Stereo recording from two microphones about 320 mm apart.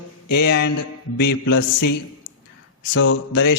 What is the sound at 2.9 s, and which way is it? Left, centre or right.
Speech, left.